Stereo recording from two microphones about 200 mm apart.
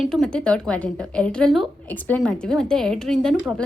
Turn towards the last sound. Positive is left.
turn(degrees=0)  # may be behind; listen again after turning